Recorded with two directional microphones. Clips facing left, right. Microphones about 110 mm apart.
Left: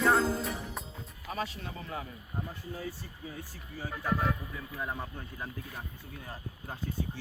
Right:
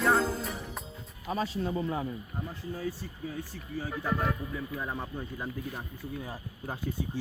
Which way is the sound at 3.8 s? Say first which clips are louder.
Even; centre (ahead or behind).